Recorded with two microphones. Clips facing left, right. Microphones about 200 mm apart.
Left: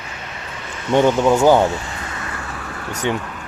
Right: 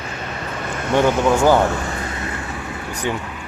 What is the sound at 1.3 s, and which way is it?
Speech, 15° left (ahead or behind).